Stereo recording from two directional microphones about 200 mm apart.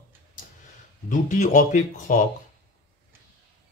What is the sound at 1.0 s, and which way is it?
Speech, 40° left (ahead or behind).